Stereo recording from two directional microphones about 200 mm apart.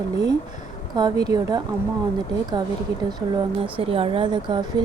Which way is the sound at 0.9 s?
20° right (ahead or behind).